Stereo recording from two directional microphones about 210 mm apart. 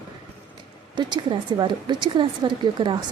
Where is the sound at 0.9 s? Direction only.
20° right (ahead or behind).